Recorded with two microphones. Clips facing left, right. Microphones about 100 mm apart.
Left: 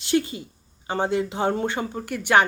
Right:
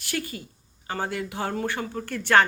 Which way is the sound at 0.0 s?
20° left (ahead or behind).